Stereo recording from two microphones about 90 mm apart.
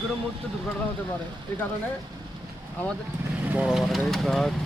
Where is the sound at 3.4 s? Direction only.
15° right (ahead or behind).